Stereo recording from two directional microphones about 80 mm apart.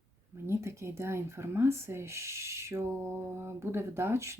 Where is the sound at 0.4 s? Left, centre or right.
Right.